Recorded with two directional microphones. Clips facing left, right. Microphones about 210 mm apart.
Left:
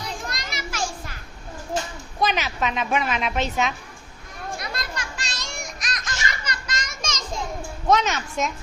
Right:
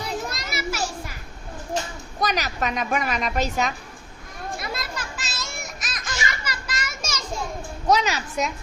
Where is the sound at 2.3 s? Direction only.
Centre (ahead or behind).